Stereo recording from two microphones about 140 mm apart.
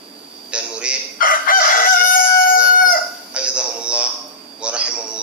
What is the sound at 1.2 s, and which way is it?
Chicken, 80° left.